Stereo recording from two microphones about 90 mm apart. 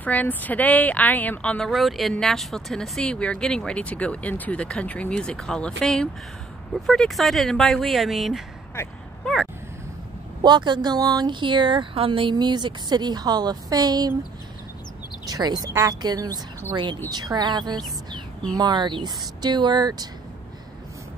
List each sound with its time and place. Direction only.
0.0 s speech: 15° left (ahead or behind)
1.6 s speech: centre (ahead or behind)
8.8 s speech: 30° left (ahead or behind)
9.2 s a sound: 5° left (ahead or behind)
10.4 s speech: 55° right (ahead or behind)
15.2 s speech: 50° right (ahead or behind)